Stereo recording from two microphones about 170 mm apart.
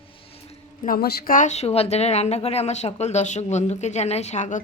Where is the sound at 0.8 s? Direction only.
60° left (ahead or behind).